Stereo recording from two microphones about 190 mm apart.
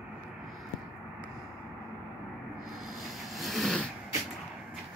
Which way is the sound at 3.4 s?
Centre (ahead or behind).